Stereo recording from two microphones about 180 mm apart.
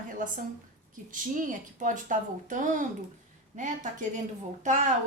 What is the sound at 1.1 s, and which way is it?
A woman's voice, 45° right (ahead or behind).